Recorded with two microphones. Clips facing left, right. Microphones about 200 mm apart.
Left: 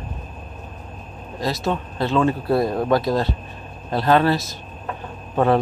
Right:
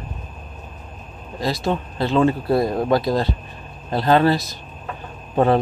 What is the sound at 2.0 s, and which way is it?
Speech, 35° right (ahead or behind).